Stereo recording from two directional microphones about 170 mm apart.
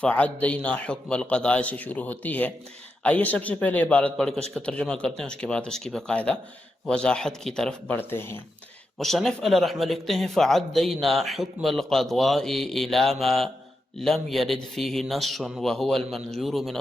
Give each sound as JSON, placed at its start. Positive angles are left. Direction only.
{"t": 0.0, "sound": "a man's voice", "side_deg": 10}
{"t": 9.0, "sound": "speech", "side_deg": 0}